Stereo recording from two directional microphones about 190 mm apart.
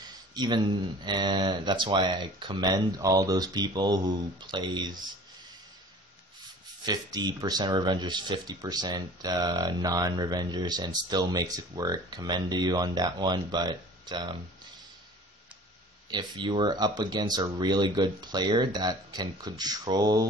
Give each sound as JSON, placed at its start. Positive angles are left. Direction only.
{"t": 0.0, "sound": "speech", "side_deg": -20}
{"t": 6.8, "sound": "speech", "side_deg": -20}
{"t": 16.1, "sound": "speech", "side_deg": -25}